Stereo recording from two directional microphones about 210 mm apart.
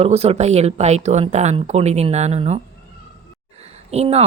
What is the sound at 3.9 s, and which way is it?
Speech, 30° right (ahead or behind).